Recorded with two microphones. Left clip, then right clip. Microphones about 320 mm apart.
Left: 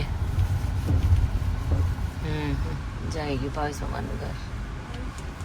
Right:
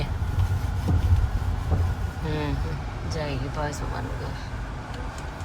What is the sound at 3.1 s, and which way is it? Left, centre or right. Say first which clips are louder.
Speech: left 1 dB; centre.